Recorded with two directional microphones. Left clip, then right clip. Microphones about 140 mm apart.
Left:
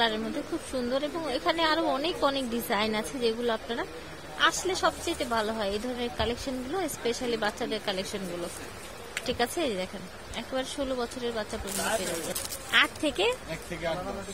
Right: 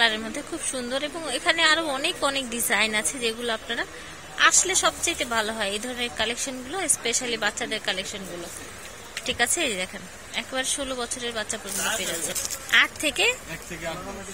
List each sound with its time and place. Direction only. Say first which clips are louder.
0.7 s a woman's voice: even; 20° left (ahead or behind)
9.1 s a woman's voice: right 4 dB; 30° left (ahead or behind)